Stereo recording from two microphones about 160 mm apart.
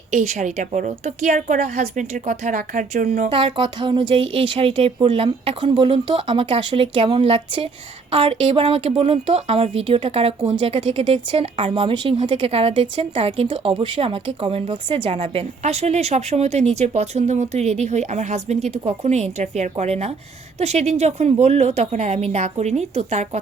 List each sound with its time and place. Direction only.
0.1 s a woman's voice: 45° right (ahead or behind)
3.2 s a woman's voice: 30° right (ahead or behind)